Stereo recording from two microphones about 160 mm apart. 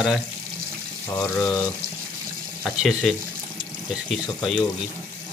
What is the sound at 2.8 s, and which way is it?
Speech, centre (ahead or behind).